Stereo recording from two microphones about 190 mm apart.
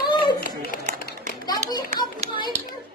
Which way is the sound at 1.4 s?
20° left (ahead or behind).